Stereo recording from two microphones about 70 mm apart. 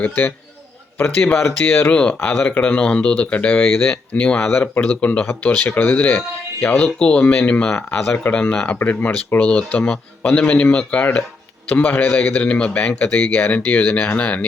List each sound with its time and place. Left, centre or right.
0.0 s speech: left
1.9 s speech: centre
4.5 s speech: left
4.8 s speech: centre